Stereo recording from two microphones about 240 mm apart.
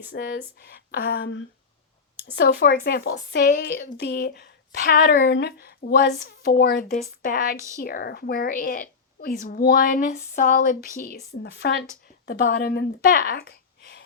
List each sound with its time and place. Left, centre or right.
0.1 s a woman's voice: left